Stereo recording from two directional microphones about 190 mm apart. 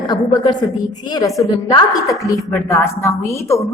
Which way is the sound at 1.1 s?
20° left (ahead or behind).